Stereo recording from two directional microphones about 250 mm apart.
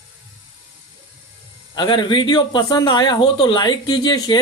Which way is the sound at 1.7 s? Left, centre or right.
Centre.